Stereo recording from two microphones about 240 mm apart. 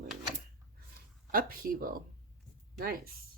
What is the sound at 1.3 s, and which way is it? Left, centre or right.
Speech, right.